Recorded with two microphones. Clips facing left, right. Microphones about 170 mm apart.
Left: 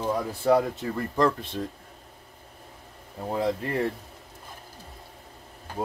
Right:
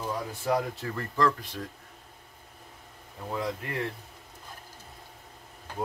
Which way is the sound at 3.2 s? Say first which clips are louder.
Left 6 dB; 35° left (ahead or behind).